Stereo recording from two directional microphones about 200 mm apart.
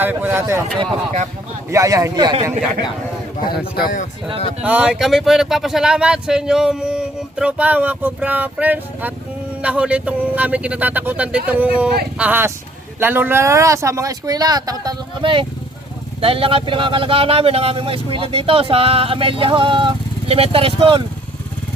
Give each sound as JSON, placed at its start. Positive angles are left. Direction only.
{"t": 0.0, "sound": "speech", "side_deg": -10}
{"t": 1.7, "sound": "speech", "side_deg": -15}
{"t": 3.8, "sound": "speech", "side_deg": 45}
{"t": 4.6, "sound": "speech", "side_deg": -5}